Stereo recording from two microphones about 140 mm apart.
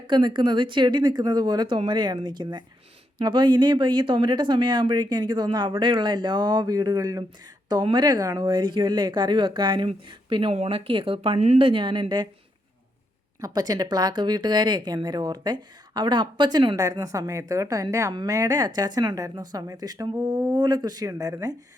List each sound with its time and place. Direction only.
0.1 s speech: 35° right (ahead or behind)
13.4 s speech: 30° right (ahead or behind)